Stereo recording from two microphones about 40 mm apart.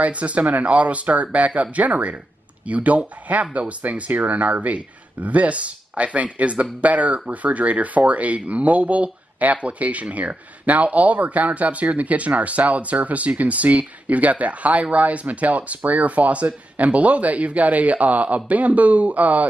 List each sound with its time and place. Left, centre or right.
0.0 s speech: right